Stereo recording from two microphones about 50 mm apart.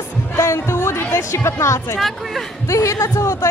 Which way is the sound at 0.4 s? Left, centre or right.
Left.